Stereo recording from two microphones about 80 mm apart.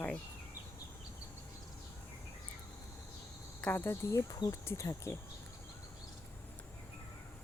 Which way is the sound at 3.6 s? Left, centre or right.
Left.